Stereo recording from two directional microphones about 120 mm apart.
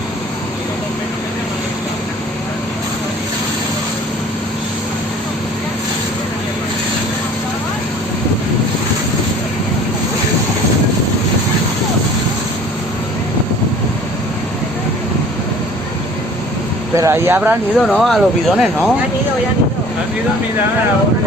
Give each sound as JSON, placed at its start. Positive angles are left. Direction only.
{"t": 17.0, "sound": "speech", "side_deg": -20}
{"t": 17.7, "sound": "speech", "side_deg": 0}